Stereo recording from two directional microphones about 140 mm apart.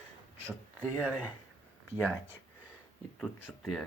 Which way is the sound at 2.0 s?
20° right (ahead or behind).